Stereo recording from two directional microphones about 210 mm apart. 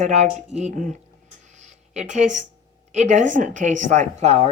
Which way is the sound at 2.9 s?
35° right (ahead or behind).